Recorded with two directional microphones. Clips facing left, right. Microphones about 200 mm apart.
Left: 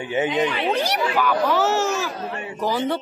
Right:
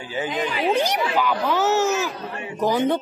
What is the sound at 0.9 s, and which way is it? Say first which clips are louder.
A child's voice: left 1 dB; 15° right (ahead or behind).